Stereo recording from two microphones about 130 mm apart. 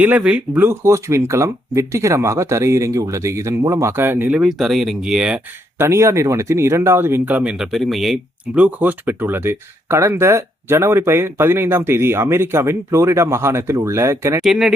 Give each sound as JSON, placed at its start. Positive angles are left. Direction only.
{"t": 0.0, "sound": "speech", "side_deg": -10}
{"t": 5.7, "sound": "speech", "side_deg": -20}
{"t": 14.4, "sound": "speech", "side_deg": -5}